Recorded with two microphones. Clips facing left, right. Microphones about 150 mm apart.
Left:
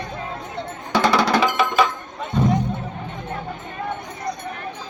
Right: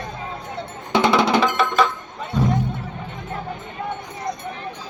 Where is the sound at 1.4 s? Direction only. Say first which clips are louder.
Even; 5° left (ahead or behind).